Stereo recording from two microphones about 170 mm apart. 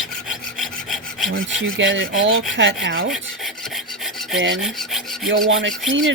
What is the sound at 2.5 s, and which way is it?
Speech, 90° right.